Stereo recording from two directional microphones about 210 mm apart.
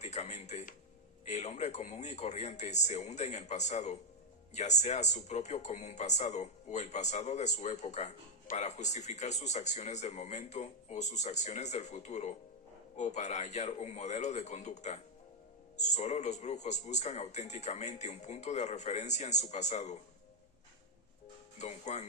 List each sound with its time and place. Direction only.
0.0 s speech: 35° left (ahead or behind)
21.6 s speech: 35° left (ahead or behind)